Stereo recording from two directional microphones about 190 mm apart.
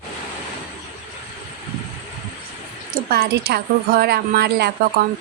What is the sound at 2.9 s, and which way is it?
A woman's voice, 55° right (ahead or behind).